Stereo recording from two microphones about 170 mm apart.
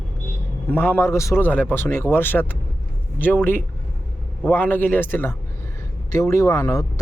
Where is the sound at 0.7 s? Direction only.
10° left (ahead or behind).